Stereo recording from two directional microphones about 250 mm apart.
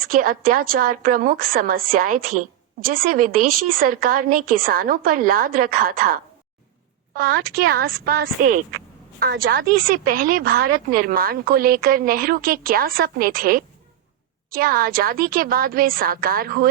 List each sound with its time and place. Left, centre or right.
0.0 s speech: right